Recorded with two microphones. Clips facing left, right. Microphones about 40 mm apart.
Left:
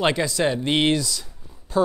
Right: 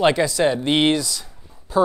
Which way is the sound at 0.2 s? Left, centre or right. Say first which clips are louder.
Right 3 dB; centre.